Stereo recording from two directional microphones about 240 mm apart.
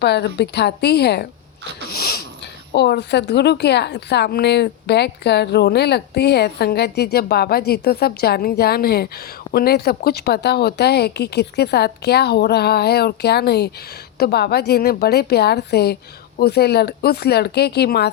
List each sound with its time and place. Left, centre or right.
0.0 s a woman's voice: left
1.9 s a sound: left
2.7 s a woman's voice: left